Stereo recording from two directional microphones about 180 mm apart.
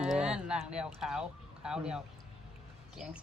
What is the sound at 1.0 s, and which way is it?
Speech, 5° right (ahead or behind).